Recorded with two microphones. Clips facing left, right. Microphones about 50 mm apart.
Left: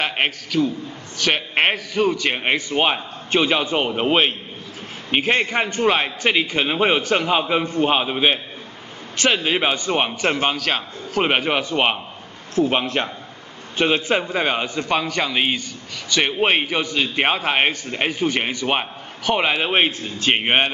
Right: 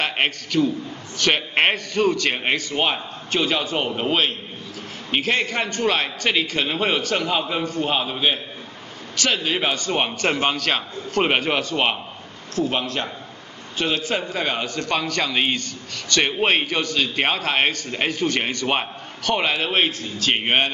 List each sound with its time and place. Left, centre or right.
0.0 s a man's voice: centre
12.5 s a man's voice: left